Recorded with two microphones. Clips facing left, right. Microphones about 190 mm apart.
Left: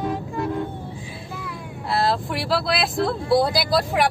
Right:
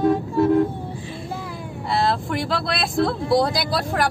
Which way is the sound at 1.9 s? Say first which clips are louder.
Right 1 dB; centre (ahead or behind).